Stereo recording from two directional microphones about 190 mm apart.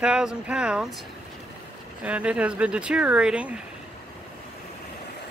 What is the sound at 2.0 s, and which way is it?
Speech, 5° right (ahead or behind).